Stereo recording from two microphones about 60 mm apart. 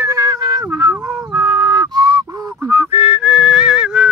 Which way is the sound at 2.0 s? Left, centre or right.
Right.